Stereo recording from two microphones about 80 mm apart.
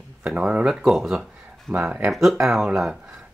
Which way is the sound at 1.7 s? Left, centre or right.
Right.